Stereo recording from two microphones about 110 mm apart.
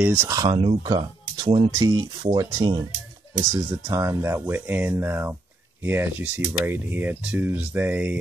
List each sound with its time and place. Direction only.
0.0 s speech: 20° right (ahead or behind)
0.4 s speech: 50° right (ahead or behind)
1.8 s speech: 35° right (ahead or behind); by 8.2 s 15° right (ahead or behind)